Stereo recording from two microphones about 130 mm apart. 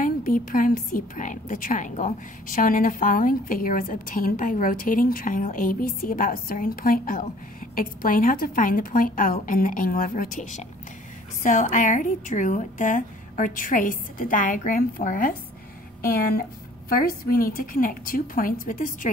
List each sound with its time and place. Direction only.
0.0 s a woman's voice: 90° left
16.9 s a woman's voice: 90° left